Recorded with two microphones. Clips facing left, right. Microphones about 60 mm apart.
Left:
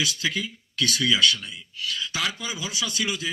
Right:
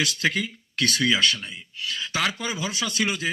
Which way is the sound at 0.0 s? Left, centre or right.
Right.